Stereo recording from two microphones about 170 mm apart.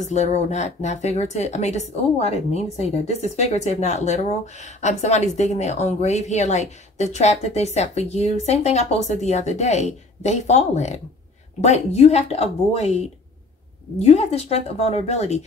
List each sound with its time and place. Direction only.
0.0 s speech: 45° left (ahead or behind)